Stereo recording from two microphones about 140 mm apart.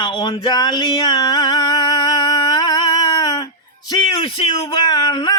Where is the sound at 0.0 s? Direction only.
35° left (ahead or behind).